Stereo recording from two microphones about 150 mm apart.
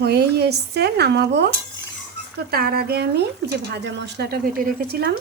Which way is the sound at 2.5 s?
90° right.